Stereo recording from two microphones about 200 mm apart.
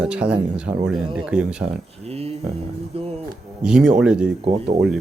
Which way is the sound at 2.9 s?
30° right (ahead or behind).